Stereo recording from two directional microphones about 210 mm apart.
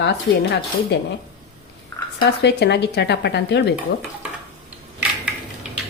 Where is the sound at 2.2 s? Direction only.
55° left (ahead or behind).